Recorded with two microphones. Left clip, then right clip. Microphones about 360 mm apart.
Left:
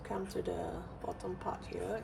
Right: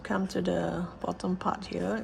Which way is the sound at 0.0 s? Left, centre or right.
Right.